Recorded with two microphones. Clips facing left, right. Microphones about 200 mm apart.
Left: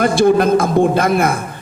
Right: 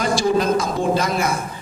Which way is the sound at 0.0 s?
55° left (ahead or behind).